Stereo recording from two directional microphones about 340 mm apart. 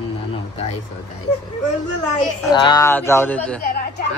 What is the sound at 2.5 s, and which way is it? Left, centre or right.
Speech, centre.